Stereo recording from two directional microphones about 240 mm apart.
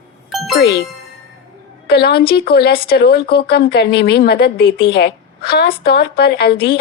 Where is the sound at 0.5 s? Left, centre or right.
Left.